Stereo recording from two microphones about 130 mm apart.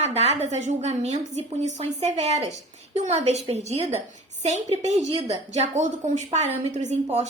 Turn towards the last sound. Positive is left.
turn(degrees=-65)  # may be behind; listen again after turning